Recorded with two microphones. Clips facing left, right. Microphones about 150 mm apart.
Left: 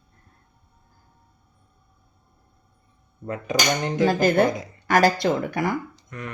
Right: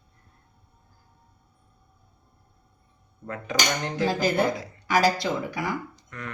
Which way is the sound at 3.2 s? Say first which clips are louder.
Left 4 dB; 20° left (ahead or behind).